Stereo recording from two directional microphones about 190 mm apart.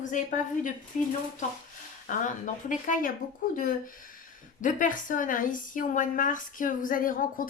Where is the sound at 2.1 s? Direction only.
45° left (ahead or behind).